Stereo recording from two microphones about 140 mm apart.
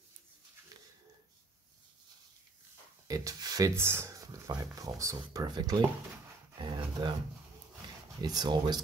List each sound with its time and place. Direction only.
3.1 s speech: 25° right (ahead or behind)
6.6 s dog: 35° right (ahead or behind)
8.2 s speech: 30° right (ahead or behind)